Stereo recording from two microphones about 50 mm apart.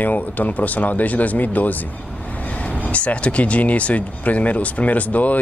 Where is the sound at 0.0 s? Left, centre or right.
Left.